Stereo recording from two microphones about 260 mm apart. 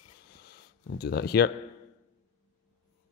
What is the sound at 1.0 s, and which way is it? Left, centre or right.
Speech, left.